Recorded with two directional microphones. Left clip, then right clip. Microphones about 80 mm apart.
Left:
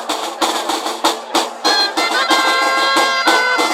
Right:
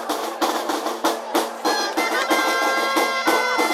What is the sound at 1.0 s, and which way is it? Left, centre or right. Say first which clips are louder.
Music: left 6 dB; left.